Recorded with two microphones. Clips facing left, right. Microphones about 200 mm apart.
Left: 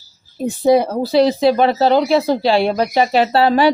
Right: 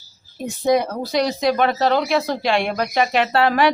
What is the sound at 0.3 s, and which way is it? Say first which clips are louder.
A woman's voice: left 5 dB; 30° left (ahead or behind).